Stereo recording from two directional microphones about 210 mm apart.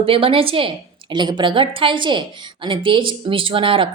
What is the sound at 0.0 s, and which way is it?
A woman's voice, 25° right (ahead or behind).